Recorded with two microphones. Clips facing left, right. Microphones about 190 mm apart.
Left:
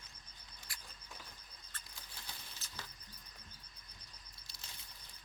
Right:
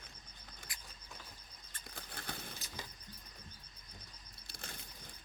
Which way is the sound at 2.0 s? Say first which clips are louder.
Right 9 dB; 60° right (ahead or behind).